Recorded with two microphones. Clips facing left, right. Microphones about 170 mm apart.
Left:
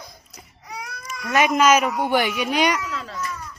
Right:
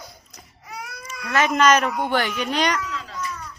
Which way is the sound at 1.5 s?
10° left (ahead or behind).